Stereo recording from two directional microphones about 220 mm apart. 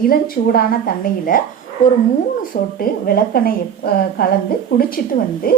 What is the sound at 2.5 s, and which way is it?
A woman's voice, 40° left (ahead or behind).